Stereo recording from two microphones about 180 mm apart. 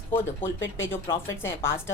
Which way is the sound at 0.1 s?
10° left (ahead or behind).